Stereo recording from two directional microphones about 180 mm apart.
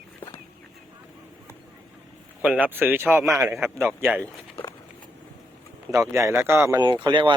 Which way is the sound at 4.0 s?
10° right (ahead or behind).